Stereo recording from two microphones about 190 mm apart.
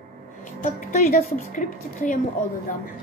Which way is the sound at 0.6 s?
40° left (ahead or behind).